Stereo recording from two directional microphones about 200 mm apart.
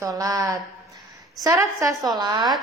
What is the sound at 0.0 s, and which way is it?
A woman's voice, 15° right (ahead or behind).